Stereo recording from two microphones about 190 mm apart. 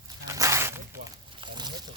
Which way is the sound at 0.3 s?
15° right (ahead or behind).